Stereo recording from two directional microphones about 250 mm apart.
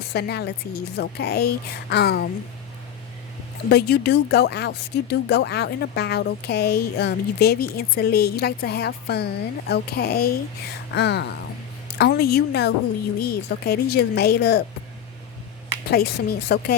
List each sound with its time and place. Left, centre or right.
0.1 s speech: left
3.7 s speech: left
15.9 s speech: left